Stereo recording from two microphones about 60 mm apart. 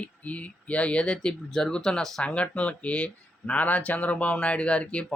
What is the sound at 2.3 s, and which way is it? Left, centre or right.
Speech, left.